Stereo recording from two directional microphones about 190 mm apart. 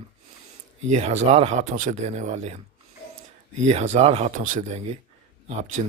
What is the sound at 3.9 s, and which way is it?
Speech, 35° right (ahead or behind).